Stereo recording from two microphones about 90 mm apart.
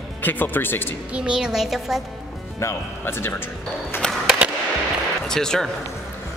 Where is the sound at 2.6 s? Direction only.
30° left (ahead or behind).